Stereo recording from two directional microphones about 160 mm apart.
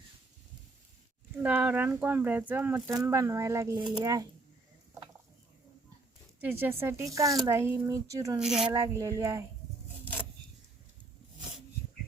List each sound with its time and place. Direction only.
1.4 s speech: 10° right (ahead or behind)
6.4 s speech: 15° right (ahead or behind)
8.4 s speech: 5° right (ahead or behind)
8.9 s speech: 20° right (ahead or behind)